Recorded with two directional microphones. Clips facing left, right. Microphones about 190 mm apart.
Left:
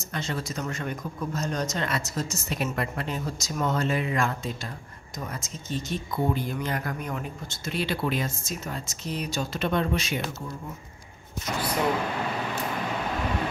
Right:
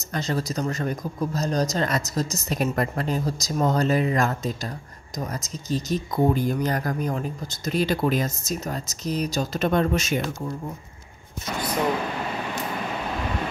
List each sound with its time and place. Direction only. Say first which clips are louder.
0.1 s speech: right 5 dB; 40° right (ahead or behind)